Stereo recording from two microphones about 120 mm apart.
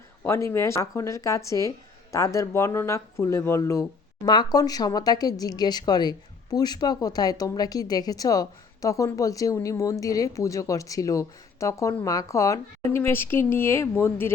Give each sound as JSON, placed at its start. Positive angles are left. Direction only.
{"t": 0.3, "sound": "speech", "side_deg": 25}